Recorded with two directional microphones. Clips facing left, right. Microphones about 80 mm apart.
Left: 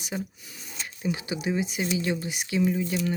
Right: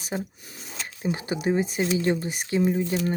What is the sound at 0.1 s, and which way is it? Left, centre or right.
Speech, right.